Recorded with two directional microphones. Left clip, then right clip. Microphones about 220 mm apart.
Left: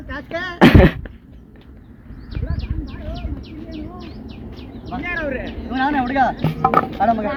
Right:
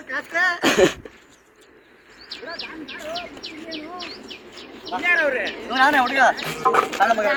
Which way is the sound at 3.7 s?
55° right (ahead or behind).